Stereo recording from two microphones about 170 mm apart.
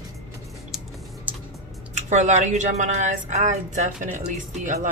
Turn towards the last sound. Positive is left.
turn(degrees=-50)  # may be behind; listen again after turning